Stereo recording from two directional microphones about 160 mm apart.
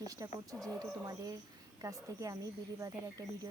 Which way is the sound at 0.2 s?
20° right (ahead or behind).